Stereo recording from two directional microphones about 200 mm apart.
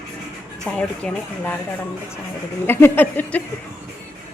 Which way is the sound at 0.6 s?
5° left (ahead or behind).